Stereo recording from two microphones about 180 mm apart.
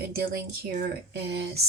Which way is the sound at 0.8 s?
65° right (ahead or behind).